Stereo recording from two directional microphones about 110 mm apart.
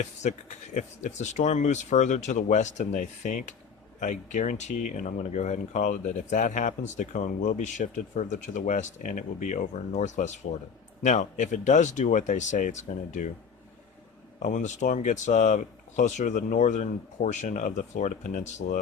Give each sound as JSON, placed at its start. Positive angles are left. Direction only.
{"t": 0.0, "sound": "speech", "side_deg": 90}
{"t": 14.3, "sound": "speech", "side_deg": 90}